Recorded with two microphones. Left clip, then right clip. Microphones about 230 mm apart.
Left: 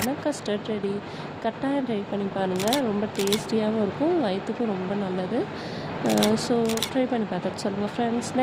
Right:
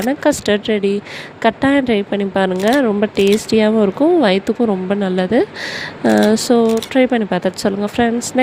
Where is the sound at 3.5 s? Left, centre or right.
Right.